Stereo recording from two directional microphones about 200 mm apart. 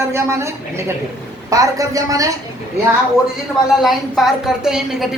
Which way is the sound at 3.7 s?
Centre (ahead or behind).